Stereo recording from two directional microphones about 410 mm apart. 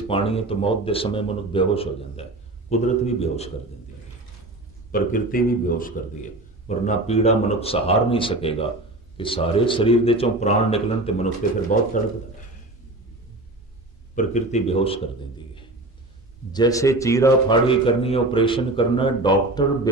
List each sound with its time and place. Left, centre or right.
0.1 s a man's voice: centre
4.9 s a man's voice: centre
14.1 s a man's voice: centre